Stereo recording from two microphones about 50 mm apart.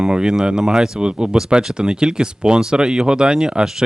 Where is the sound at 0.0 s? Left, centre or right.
Centre.